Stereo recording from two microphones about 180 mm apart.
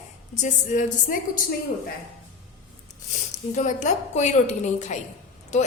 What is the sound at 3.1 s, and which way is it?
A woman's voice, 40° left (ahead or behind).